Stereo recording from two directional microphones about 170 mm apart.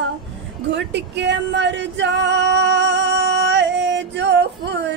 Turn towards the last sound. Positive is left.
turn(degrees=-90)